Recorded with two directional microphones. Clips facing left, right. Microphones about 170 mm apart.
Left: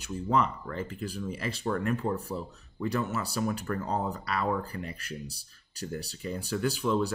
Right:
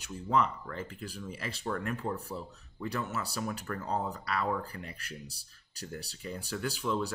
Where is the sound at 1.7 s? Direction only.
35° left (ahead or behind).